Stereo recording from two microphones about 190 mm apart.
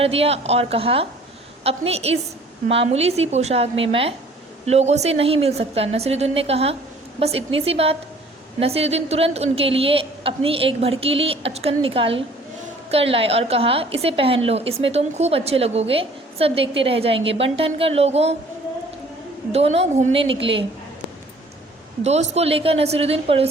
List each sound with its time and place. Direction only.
0.0 s a woman's voice: 30° right (ahead or behind)
19.5 s a woman's voice: 35° right (ahead or behind)
22.0 s a woman's voice: 35° right (ahead or behind)